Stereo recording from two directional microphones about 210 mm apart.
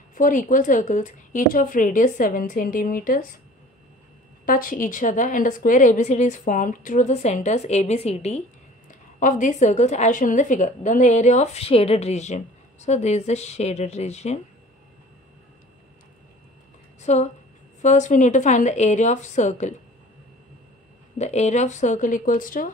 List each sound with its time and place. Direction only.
0.1 s a woman's voice: 40° left (ahead or behind)
4.5 s a woman's voice: 40° left (ahead or behind)
17.0 s a woman's voice: 35° left (ahead or behind)
21.2 s a woman's voice: 30° left (ahead or behind)